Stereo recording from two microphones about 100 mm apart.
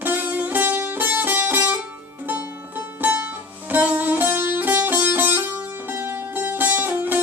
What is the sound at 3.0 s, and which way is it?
Music, 20° right (ahead or behind).